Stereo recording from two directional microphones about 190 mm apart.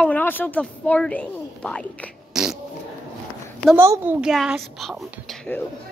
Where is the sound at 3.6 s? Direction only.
10° right (ahead or behind); by 5.7 s 5° left (ahead or behind).